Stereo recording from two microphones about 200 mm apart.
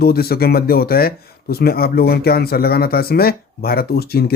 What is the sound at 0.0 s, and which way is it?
Speech, 50° left (ahead or behind).